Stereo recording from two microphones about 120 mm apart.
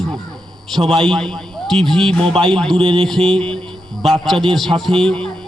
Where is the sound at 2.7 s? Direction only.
50° right (ahead or behind).